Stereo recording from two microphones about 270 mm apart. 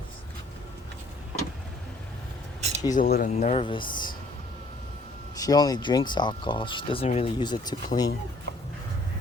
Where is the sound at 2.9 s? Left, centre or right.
Left.